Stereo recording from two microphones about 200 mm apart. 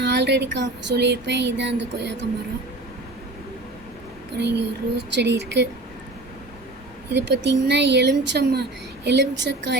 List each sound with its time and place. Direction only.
0.0 s speech: 60° right (ahead or behind)
4.4 s speech: 55° right (ahead or behind)
7.1 s speech: 60° right (ahead or behind)